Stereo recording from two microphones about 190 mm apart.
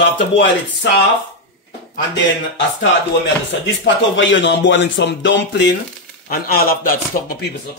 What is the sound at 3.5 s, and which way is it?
Speech, 75° left (ahead or behind).